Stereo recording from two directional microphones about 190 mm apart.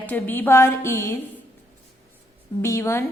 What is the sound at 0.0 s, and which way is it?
A woman's voice, 10° left (ahead or behind).